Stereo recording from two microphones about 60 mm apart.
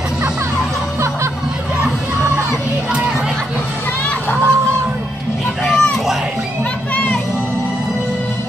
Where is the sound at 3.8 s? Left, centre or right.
Left.